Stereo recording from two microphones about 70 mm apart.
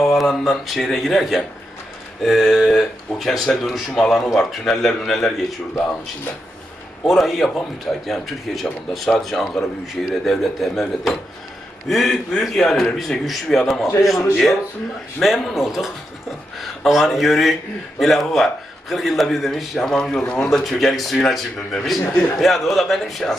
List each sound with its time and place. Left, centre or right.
0.2 s speech: centre
7.0 s speech: centre
20.2 s speech: centre
20.5 s speech: centre